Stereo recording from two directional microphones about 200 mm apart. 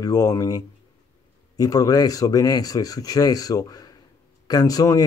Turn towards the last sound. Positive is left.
turn(degrees=20)  # may be behind; listen again after turning